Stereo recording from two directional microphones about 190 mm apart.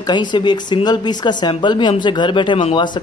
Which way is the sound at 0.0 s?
25° left (ahead or behind).